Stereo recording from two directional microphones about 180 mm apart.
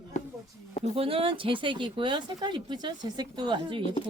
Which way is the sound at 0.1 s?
40° left (ahead or behind).